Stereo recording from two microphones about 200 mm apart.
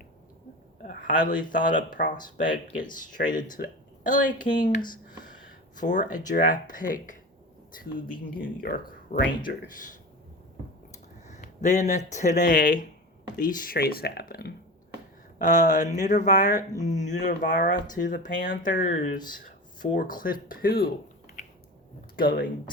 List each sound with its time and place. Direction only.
0.8 s speech: 40° left (ahead or behind)
5.2 s a sound: 40° left (ahead or behind)
6.1 s speech: 40° left (ahead or behind)
8.4 s speech: 45° left (ahead or behind)
15.4 s speech: 40° left (ahead or behind)
21.4 s a sound: 40° left (ahead or behind)
22.1 s speech: 45° left (ahead or behind)